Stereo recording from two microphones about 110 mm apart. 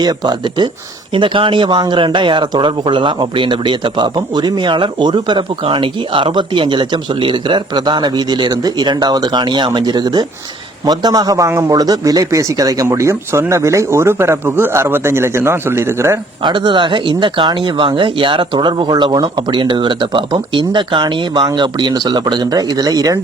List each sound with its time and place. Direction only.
0.0 s a man's voice: 40° right (ahead or behind)
16.4 s a man's voice: 45° right (ahead or behind)
19.5 s a man's voice: 50° right (ahead or behind); by 23.2 s 35° right (ahead or behind)